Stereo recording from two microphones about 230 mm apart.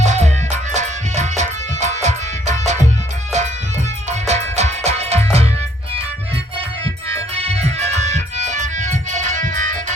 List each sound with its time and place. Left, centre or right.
0.0 s music: right
4.1 s music: right
7.4 s music: right